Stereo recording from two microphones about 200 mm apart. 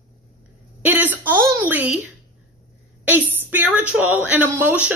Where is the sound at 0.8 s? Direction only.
10° right (ahead or behind).